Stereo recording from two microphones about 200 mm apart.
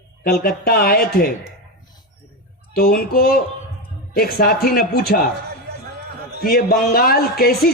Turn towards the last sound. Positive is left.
turn(degrees=50)  # may be behind; listen again after turning